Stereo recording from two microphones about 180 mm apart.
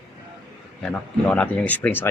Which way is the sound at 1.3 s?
10° left (ahead or behind).